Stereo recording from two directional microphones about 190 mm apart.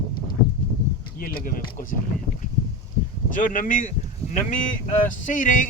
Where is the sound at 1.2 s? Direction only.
50° left (ahead or behind).